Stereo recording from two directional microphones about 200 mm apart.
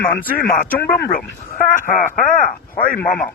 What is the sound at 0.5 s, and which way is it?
A man's voice, 45° left (ahead or behind).